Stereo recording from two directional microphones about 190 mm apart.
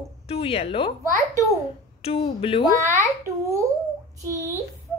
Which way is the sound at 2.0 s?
30° left (ahead or behind).